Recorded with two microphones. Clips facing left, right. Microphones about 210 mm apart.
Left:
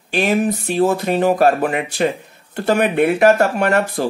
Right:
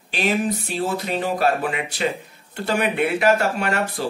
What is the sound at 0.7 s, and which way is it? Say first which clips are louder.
Speech: left 10 dB; 50° left (ahead or behind).